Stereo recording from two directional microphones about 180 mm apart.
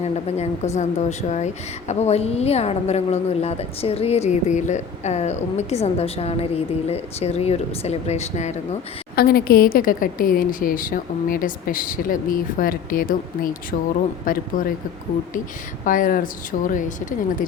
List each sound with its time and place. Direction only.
0.0 s a woman's voice: 35° left (ahead or behind)
9.1 s a woman's voice: 55° left (ahead or behind)
15.8 s a woman's voice: 50° left (ahead or behind)